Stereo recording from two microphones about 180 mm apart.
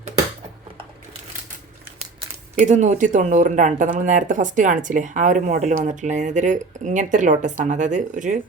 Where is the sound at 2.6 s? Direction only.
40° right (ahead or behind).